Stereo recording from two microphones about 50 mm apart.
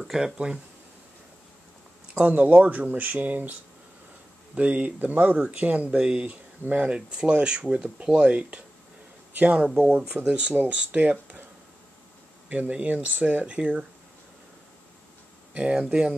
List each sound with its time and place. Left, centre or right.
0.0 s speech: centre
2.1 s speech: right
4.6 s speech: right
5.9 s speech: centre
6.2 s speech: right
6.8 s speech: right
9.7 s speech: centre
10.2 s speech: right
12.4 s speech: right
15.5 s speech: centre